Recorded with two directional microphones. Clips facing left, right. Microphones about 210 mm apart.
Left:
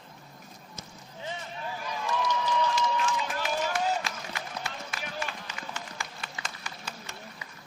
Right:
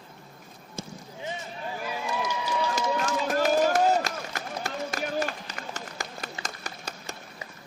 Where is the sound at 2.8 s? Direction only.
45° right (ahead or behind).